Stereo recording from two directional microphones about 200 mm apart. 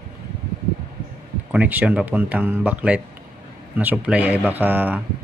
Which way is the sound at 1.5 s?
10° right (ahead or behind).